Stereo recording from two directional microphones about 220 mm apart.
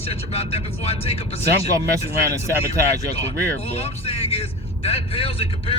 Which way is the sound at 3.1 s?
25° left (ahead or behind).